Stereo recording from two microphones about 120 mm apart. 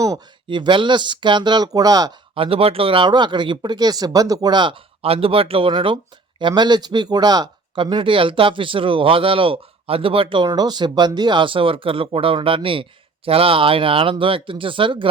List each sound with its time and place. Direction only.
0.4 s speech: 45° right (ahead or behind)
2.3 s speech: 50° right (ahead or behind)